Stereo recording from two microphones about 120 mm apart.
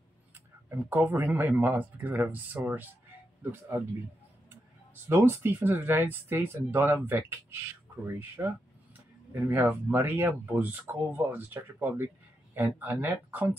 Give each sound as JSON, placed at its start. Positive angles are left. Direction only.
{"t": 0.7, "sound": "speech", "side_deg": -15}
{"t": 5.0, "sound": "speech", "side_deg": -20}